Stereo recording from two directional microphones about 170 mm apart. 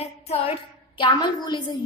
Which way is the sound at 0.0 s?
35° left (ahead or behind).